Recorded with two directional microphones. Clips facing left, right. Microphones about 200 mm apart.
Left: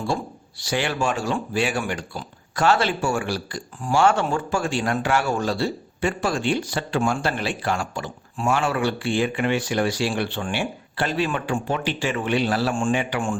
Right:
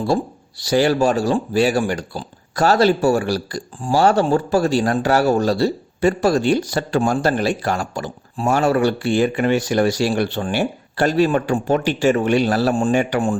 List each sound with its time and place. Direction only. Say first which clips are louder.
0.0 s speech: right 7 dB; 35° right (ahead or behind)